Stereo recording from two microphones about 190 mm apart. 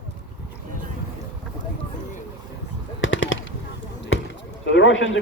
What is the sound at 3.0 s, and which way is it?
Machine gun, 90° left.